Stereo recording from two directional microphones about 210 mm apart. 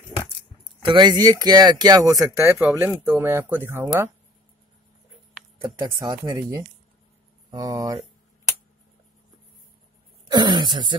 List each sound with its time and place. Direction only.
0.8 s speech: 20° right (ahead or behind)
5.6 s speech: 20° right (ahead or behind)
10.2 s speech: 20° right (ahead or behind)